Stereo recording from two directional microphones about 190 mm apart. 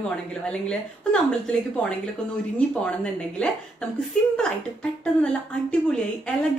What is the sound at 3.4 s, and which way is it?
Speech, 5° left (ahead or behind).